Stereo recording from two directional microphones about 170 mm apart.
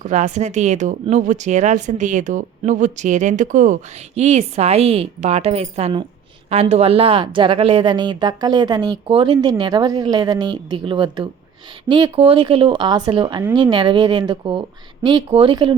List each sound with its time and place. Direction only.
0.0 s speech: 45° right (ahead or behind)